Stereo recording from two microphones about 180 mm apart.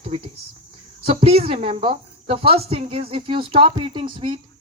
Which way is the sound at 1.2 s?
35° right (ahead or behind).